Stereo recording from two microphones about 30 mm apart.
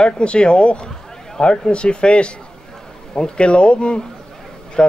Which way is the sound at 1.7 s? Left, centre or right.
Left.